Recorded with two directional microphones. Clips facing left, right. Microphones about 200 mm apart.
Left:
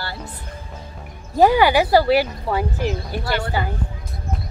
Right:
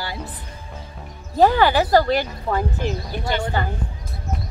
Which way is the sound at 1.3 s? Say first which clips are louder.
Left 1 dB; 10° left (ahead or behind).